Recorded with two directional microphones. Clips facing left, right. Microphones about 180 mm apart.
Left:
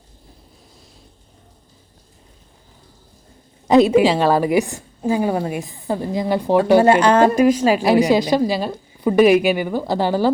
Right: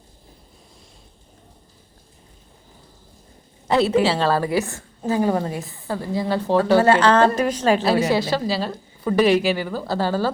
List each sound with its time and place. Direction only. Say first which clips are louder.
3.7 s a woman's voice: left 5 dB; 15° left (ahead or behind)